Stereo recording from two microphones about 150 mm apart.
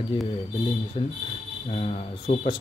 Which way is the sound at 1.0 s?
40° left (ahead or behind).